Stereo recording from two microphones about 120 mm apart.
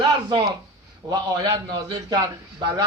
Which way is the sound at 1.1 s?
35° right (ahead or behind).